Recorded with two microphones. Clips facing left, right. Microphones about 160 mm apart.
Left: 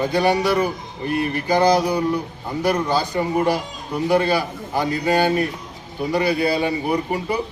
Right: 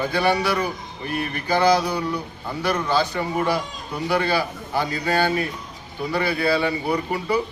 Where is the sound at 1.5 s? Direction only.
15° left (ahead or behind).